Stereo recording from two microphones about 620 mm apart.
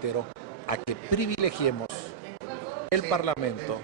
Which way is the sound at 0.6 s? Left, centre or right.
Left.